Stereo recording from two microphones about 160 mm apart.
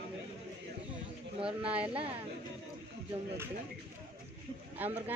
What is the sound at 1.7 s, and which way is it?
Speech, 35° right (ahead or behind).